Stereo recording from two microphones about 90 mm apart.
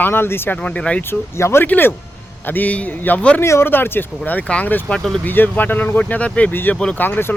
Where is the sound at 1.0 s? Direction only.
30° left (ahead or behind).